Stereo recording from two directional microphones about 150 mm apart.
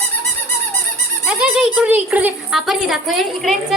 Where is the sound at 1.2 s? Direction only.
5° right (ahead or behind).